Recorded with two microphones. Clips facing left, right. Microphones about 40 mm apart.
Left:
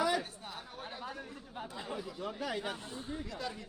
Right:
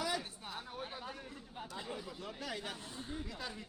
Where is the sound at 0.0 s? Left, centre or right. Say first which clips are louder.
Left 6 dB; centre.